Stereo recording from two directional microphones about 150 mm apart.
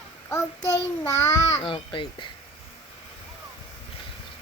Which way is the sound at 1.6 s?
35° left (ahead or behind).